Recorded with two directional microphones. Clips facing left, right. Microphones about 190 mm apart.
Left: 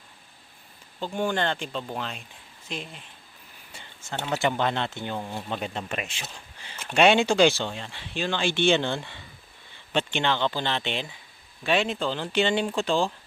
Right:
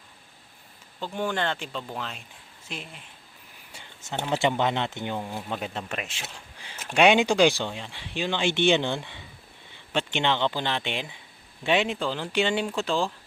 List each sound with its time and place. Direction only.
1.3 s speech: centre (ahead or behind)
5.2 s speech: 5° right (ahead or behind)
6.8 s speech: 10° right (ahead or behind)